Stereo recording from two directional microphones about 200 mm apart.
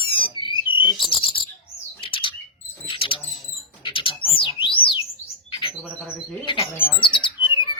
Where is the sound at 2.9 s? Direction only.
25° left (ahead or behind).